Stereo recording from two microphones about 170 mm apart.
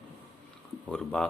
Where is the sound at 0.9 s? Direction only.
5° left (ahead or behind).